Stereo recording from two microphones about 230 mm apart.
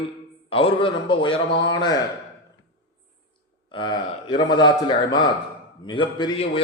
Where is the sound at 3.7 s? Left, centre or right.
Left.